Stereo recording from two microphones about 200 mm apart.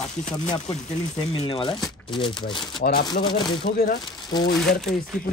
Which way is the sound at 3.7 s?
50° left (ahead or behind).